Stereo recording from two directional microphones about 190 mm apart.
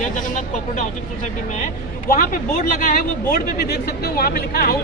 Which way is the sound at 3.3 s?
55° left (ahead or behind).